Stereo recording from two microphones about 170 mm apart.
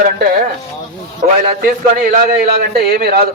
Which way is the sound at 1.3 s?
60° right (ahead or behind).